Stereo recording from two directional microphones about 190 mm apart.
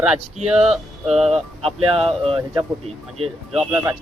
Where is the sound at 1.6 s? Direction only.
30° right (ahead or behind).